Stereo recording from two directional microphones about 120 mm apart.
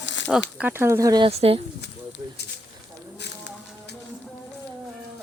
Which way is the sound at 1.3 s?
55° right (ahead or behind).